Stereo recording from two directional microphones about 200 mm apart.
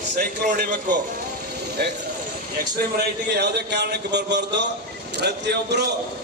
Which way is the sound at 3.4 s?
55° right (ahead or behind).